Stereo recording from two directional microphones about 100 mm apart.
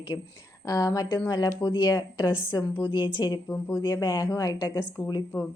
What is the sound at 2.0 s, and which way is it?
A woman's voice, 45° left (ahead or behind).